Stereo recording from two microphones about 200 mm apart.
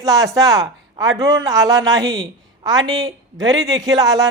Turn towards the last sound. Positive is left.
turn(degrees=-20)  # may be behind; listen again after turning